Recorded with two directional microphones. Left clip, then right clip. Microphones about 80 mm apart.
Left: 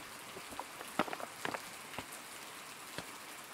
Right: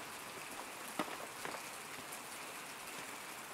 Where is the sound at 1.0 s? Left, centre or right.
Left.